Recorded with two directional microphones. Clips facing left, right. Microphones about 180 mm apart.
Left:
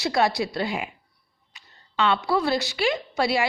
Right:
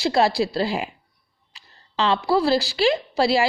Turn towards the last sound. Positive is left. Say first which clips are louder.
# right 4 dB
turn(degrees=-30)  # may be behind; listen again after turning